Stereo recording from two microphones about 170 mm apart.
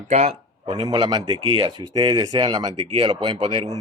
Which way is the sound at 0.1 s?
40° right (ahead or behind).